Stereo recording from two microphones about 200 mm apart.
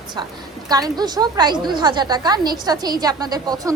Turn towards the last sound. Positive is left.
turn(degrees=-20)  # may be behind; listen again after turning